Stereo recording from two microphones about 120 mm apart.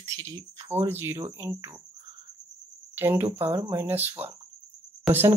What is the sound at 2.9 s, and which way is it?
Speech, 20° right (ahead or behind).